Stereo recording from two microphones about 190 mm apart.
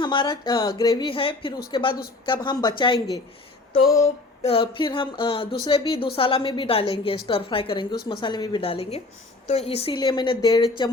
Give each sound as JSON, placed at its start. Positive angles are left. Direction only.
{"t": 0.0, "sound": "a woman's voice", "side_deg": 25}
{"t": 4.4, "sound": "a woman's voice", "side_deg": 25}